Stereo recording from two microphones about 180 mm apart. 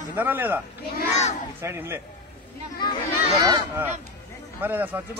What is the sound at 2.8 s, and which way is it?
Speech, 25° left (ahead or behind).